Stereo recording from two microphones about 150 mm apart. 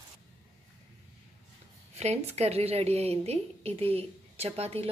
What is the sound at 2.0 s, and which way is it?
A woman's voice, 45° right (ahead or behind).